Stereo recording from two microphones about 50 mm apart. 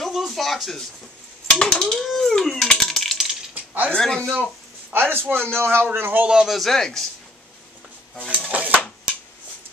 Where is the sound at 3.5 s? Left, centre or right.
Right.